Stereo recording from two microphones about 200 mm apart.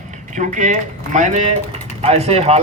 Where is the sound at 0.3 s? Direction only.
40° right (ahead or behind).